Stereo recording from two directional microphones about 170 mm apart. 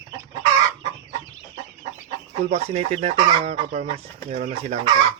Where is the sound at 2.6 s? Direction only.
35° right (ahead or behind).